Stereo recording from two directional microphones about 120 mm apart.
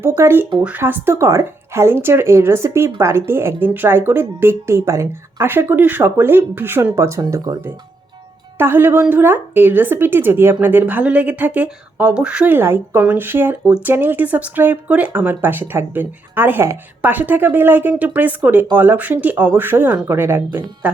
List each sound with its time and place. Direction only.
0.2 s speech: 20° right (ahead or behind)
8.5 s speech: 15° right (ahead or behind)